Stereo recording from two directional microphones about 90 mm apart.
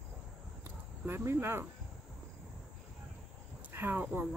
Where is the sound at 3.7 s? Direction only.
20° right (ahead or behind).